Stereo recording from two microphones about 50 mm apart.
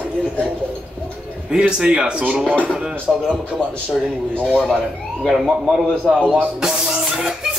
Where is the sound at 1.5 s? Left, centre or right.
Centre.